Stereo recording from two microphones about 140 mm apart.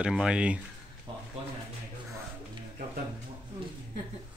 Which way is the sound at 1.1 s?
40° right (ahead or behind).